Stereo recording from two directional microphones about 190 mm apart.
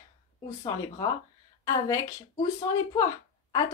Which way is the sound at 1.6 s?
15° left (ahead or behind).